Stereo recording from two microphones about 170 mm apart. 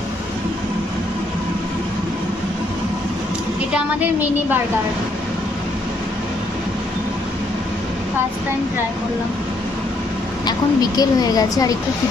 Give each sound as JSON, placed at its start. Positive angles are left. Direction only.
{"t": 3.7, "sound": "a woman's voice", "side_deg": -10}
{"t": 10.4, "sound": "a woman's voice", "side_deg": 20}